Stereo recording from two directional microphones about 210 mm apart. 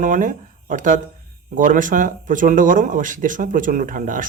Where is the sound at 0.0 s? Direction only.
40° right (ahead or behind).